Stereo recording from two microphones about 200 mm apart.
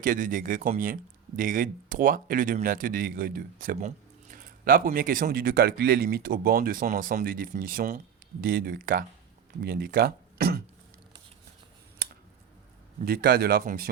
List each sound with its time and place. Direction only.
0.0 s speech: 40° right (ahead or behind)
13.1 s speech: 50° right (ahead or behind)